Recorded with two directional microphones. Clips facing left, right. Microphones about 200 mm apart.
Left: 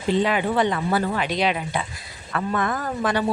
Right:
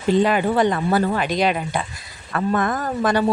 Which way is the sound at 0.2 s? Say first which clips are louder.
Right 3 dB; 45° right (ahead or behind).